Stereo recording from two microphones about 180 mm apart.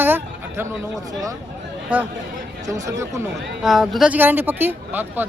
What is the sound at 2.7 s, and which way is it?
Speech, 15° right (ahead or behind).